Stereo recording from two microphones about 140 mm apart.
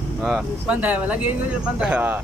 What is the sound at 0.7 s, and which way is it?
Speech, 10° right (ahead or behind).